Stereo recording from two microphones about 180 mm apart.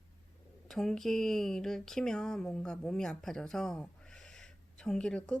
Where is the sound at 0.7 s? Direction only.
Centre (ahead or behind).